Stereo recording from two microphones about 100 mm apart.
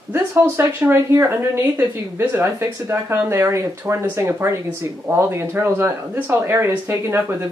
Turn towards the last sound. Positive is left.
turn(degrees=-25)  # may be behind; listen again after turning